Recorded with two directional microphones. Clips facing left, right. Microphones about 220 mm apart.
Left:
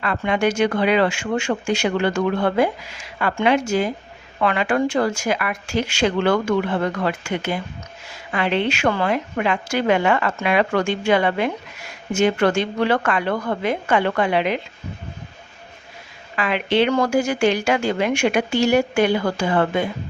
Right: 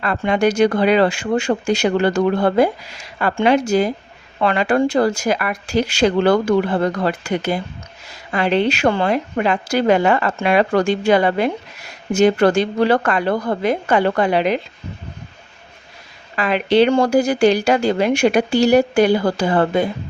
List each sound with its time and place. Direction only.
0.0 s a woman's voice: 40° right (ahead or behind)
16.3 s a woman's voice: 40° right (ahead or behind)